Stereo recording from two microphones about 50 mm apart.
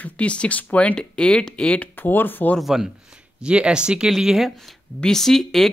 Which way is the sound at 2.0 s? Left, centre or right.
Left.